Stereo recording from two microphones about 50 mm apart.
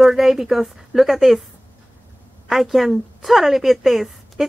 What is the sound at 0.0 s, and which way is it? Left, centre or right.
Speech, centre.